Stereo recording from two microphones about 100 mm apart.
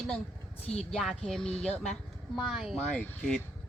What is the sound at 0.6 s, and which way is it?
Speech, 90° left.